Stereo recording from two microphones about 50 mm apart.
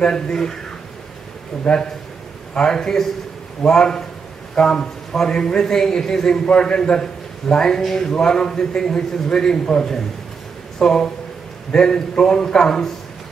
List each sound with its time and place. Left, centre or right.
0.0 s a man's voice: centre
1.6 s a man's voice: centre